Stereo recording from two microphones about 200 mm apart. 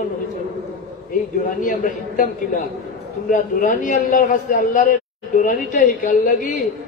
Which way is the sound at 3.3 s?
40° left (ahead or behind).